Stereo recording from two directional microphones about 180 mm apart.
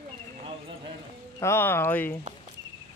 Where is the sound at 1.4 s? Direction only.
15° left (ahead or behind).